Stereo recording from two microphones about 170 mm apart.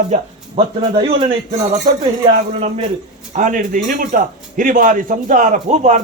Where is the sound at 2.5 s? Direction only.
35° right (ahead or behind).